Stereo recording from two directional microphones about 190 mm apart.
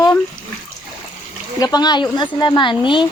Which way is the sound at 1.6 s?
20° left (ahead or behind).